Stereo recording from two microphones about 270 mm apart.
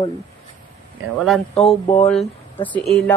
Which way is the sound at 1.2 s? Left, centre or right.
Centre.